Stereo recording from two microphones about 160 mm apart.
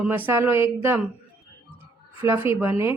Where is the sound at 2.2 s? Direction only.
15° right (ahead or behind).